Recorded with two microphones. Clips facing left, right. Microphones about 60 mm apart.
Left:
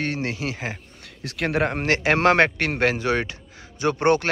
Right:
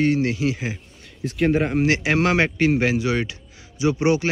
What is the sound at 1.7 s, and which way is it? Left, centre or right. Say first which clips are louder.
Speech: right 2 dB; left.